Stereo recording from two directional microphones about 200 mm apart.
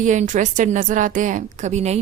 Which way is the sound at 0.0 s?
40° right (ahead or behind).